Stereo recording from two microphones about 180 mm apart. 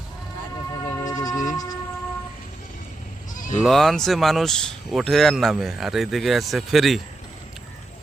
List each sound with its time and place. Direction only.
0.9 s sheep: 15° left (ahead or behind)
1.5 s train: 20° left (ahead or behind)
3.3 s bleat: 45° left (ahead or behind)
3.6 s speech: centre (ahead or behind)